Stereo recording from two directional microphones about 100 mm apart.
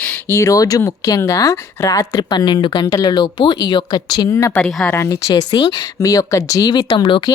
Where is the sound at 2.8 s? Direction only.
40° left (ahead or behind).